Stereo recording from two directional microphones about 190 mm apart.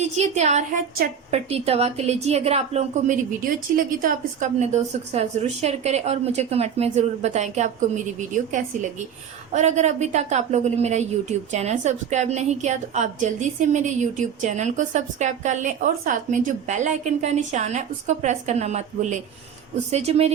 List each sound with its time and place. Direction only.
0.0 s speech: 35° right (ahead or behind)
9.5 s speech: 40° right (ahead or behind)